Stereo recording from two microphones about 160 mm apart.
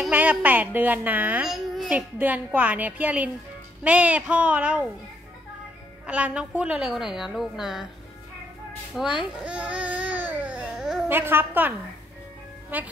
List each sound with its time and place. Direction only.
0.0 s speech: 10° right (ahead or behind)
6.0 s a woman's voice: 5° right (ahead or behind)
9.2 s baby cry: 5° right (ahead or behind)
11.1 s speech: 15° right (ahead or behind)
12.7 s speech: 10° right (ahead or behind)